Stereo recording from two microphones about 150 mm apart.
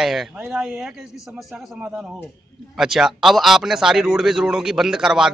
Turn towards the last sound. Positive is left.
turn(degrees=-5)  # may be behind; listen again after turning